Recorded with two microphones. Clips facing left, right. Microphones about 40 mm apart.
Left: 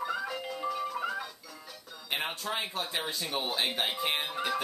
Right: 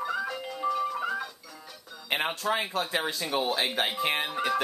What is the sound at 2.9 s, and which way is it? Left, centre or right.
Speech, right.